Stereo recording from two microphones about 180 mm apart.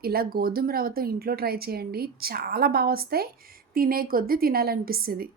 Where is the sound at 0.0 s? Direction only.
55° right (ahead or behind).